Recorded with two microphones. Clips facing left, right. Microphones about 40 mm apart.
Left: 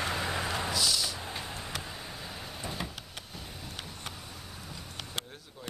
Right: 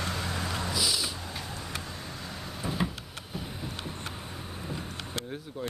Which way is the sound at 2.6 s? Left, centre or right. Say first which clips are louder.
Right 7 dB; centre.